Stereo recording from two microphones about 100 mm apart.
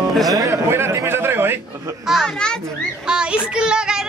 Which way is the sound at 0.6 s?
25° right (ahead or behind).